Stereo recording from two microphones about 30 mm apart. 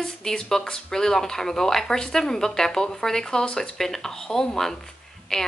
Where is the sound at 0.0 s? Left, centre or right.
Left.